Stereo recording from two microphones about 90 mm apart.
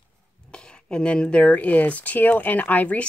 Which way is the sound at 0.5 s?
10° left (ahead or behind).